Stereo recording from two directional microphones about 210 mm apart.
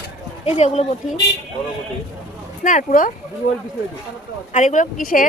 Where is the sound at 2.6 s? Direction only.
40° left (ahead or behind).